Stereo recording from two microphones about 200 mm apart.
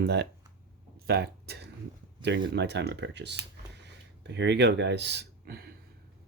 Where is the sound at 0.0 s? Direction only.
55° right (ahead or behind).